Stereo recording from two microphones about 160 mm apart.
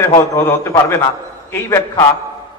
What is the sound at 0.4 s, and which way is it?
A man's voice, 15° left (ahead or behind).